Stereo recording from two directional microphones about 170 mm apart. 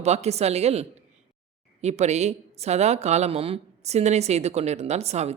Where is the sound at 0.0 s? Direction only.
40° right (ahead or behind).